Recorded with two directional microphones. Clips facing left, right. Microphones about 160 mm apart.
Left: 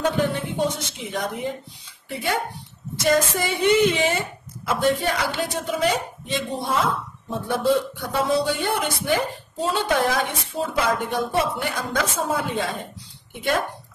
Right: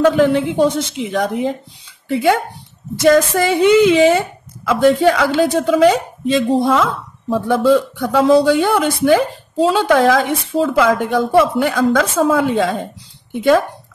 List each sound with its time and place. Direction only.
0.0 s a woman's voice: 90° right